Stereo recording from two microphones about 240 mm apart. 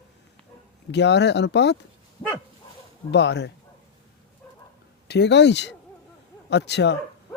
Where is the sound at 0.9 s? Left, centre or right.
Left.